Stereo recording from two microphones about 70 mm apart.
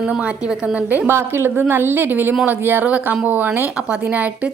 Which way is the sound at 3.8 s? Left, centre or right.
Centre.